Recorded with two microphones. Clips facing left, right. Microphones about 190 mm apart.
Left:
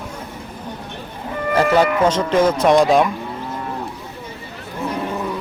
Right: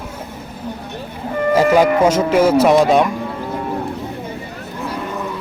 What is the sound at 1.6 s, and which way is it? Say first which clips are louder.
Speech: right 2 dB; 10° right (ahead or behind).